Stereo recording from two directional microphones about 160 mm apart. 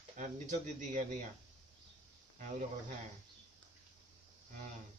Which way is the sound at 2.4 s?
50° right (ahead or behind).